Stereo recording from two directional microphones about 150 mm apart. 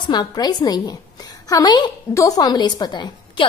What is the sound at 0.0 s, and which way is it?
A woman's voice, 30° left (ahead or behind).